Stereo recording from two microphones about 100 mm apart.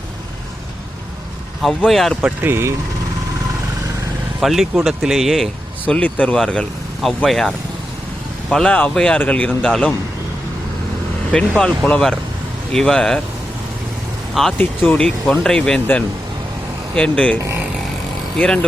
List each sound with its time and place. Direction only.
1.9 s speech: centre (ahead or behind)
2.4 s speech: 25° right (ahead or behind)
4.4 s speech: centre (ahead or behind)
5.8 s speech: 15° left (ahead or behind)
11.3 s speech: 10° left (ahead or behind)
14.6 s speech: 20° left (ahead or behind)
14.9 s speech: 5° left (ahead or behind)
18.3 s speech: 10° left (ahead or behind)